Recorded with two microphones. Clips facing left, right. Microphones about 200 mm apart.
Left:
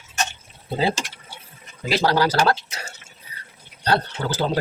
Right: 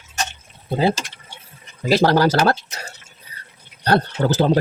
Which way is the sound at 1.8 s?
45° right (ahead or behind).